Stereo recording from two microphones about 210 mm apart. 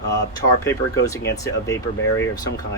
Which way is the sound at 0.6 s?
15° left (ahead or behind).